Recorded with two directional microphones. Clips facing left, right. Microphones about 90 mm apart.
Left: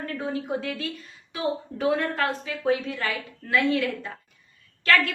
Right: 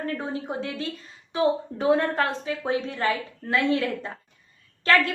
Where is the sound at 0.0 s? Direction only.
30° right (ahead or behind).